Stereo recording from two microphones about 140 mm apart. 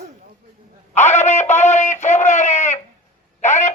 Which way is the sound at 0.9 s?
55° left (ahead or behind).